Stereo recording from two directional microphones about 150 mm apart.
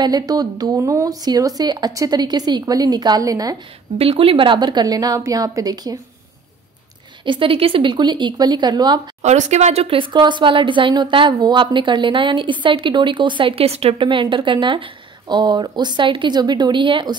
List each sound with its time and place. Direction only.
0.0 s speech: 25° right (ahead or behind)
4.0 s speech: 40° right (ahead or behind)
7.2 s speech: 35° right (ahead or behind)
9.2 s speech: 50° right (ahead or behind); by 17.1 s 30° right (ahead or behind)